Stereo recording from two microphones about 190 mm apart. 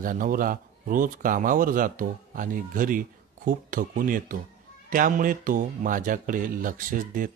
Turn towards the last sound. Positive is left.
turn(degrees=-45)  # may be behind; listen again after turning